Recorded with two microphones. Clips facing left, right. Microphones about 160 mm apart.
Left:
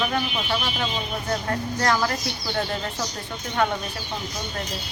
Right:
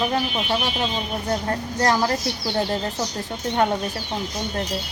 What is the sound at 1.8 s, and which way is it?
Speech, 30° right (ahead or behind).